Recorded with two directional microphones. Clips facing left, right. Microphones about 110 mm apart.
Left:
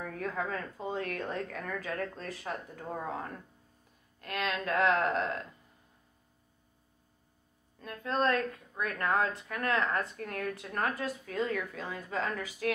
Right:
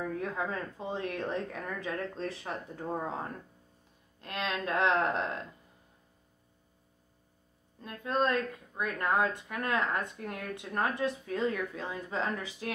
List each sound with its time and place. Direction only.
0.2 s a woman's voice: 20° right (ahead or behind)
4.2 s a woman's voice: 25° right (ahead or behind)
7.8 s a woman's voice: 20° right (ahead or behind)